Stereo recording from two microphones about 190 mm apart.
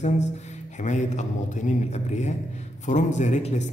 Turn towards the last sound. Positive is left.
turn(degrees=35)  # may be behind; listen again after turning